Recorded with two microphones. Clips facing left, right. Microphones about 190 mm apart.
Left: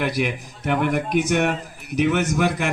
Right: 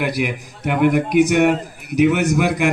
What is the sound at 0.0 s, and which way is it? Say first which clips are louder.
A man's voice: right 2 dB; 10° right (ahead or behind).